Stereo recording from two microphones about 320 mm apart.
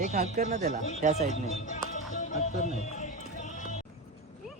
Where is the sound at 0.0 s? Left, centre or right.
Right.